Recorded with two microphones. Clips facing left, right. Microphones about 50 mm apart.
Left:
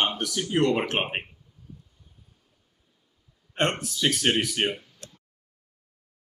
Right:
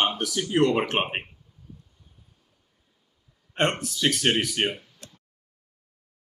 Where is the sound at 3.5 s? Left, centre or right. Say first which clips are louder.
Right 1 dB; centre.